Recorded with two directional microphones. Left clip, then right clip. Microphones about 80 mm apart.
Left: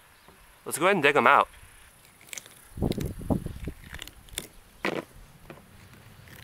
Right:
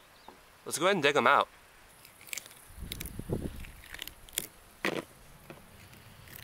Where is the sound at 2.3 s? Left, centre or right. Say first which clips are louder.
Left 1 dB; centre.